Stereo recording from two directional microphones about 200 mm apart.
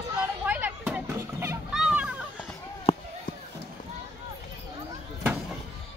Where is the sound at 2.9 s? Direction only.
30° left (ahead or behind).